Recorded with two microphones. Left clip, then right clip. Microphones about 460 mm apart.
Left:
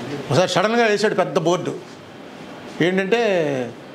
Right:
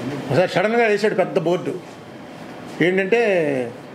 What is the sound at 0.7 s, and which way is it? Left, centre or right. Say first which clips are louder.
Speech: even; left.